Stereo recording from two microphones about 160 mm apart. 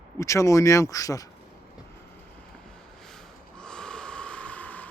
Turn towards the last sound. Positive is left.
turn(degrees=10)  # may be behind; listen again after turning